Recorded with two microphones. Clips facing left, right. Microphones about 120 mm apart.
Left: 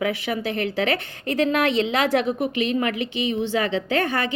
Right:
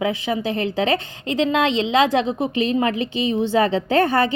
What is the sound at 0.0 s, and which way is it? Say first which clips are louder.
A woman's voice: right 2 dB; 25° right (ahead or behind).